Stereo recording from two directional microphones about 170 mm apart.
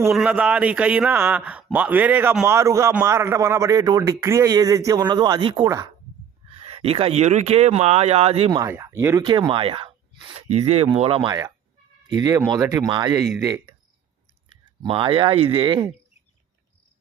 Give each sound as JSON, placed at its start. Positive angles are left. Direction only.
{"t": 0.1, "sound": "a man's voice", "side_deg": -5}
{"t": 2.5, "sound": "a man's voice", "side_deg": -15}
{"t": 6.5, "sound": "speech", "side_deg": -35}
{"t": 8.5, "sound": "a man's voice", "side_deg": -15}
{"t": 11.3, "sound": "a man's voice", "side_deg": -20}
{"t": 14.8, "sound": "a man's voice", "side_deg": -30}